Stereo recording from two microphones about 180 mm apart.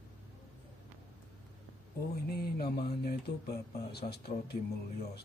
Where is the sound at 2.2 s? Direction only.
60° left (ahead or behind).